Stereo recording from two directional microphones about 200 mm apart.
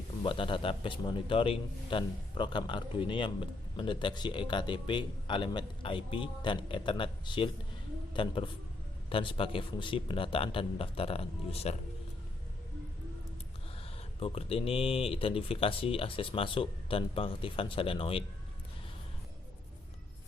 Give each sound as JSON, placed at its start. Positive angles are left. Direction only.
{"t": 0.2, "sound": "a man's voice", "side_deg": 25}
{"t": 14.2, "sound": "a man's voice", "side_deg": 30}